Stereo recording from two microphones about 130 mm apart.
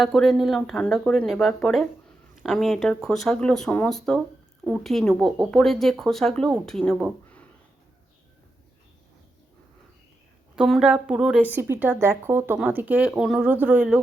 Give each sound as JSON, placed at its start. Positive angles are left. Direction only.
{"t": 0.0, "sound": "speech", "side_deg": 0}
{"t": 10.5, "sound": "speech", "side_deg": -5}
{"t": 13.5, "sound": "speech", "side_deg": -15}